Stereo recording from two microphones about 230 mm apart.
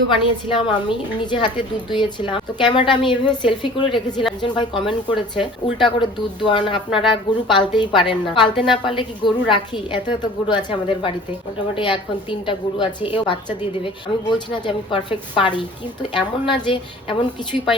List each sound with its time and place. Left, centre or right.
0.5 s a woman's voice: left